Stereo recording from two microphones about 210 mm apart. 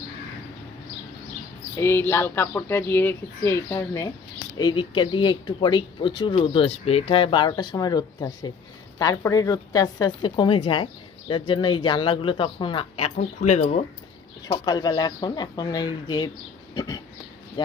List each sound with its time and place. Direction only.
1.8 s speech: 10° left (ahead or behind); by 13.8 s 30° left (ahead or behind)
14.5 s speech: 20° left (ahead or behind)
16.7 s a sound: 20° left (ahead or behind)